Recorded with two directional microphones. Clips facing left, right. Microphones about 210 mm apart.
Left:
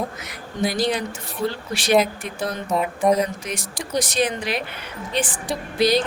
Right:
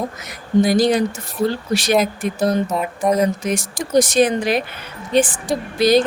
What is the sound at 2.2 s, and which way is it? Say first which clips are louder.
Speech: right 9 dB; 40° right (ahead or behind).